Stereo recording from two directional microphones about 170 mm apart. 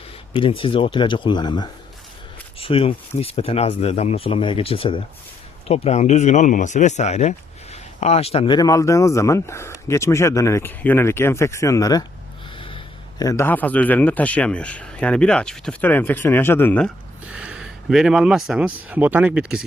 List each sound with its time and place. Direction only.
0.3 s speech: 30° left (ahead or behind)
8.5 s speech: 20° left (ahead or behind)
12.5 s a sound: 30° left (ahead or behind)
13.2 s speech: 15° left (ahead or behind)
17.3 s speech: 5° right (ahead or behind)